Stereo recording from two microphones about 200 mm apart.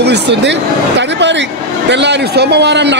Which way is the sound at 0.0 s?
60° right (ahead or behind).